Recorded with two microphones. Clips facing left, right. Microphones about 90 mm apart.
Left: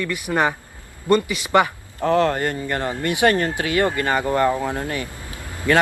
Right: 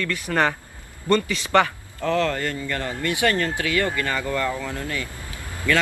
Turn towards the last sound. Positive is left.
turn(degrees=20)  # may be behind; listen again after turning